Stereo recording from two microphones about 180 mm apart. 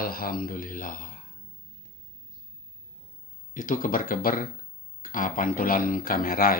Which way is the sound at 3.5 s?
50° left (ahead or behind).